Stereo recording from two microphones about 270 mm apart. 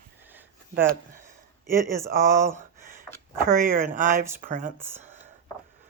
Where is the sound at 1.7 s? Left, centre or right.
Centre.